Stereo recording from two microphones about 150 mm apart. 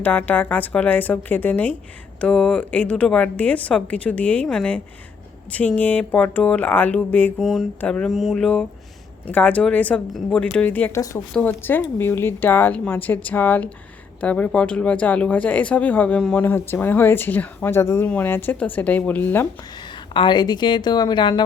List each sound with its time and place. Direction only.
0.0 s speech: 10° left (ahead or behind)
7.3 s speech: centre (ahead or behind)
20.1 s a woman's voice: 30° left (ahead or behind)